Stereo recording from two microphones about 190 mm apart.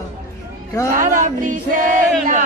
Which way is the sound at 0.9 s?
45° right (ahead or behind).